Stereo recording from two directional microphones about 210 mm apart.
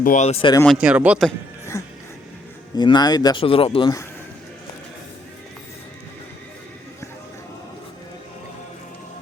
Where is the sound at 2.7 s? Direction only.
20° left (ahead or behind).